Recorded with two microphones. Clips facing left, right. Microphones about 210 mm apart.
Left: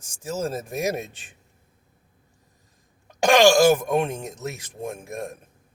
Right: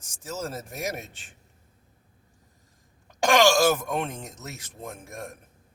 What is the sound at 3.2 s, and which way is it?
Speech, 15° left (ahead or behind).